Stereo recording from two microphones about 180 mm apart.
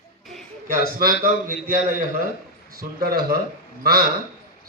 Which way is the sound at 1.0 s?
50° right (ahead or behind).